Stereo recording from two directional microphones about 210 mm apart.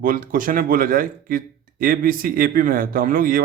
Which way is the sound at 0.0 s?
40° right (ahead or behind).